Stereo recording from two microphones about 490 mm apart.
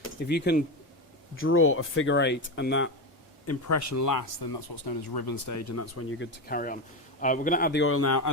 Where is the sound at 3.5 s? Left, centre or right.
Left.